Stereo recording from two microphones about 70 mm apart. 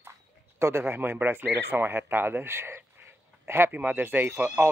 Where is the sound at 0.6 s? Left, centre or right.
Right.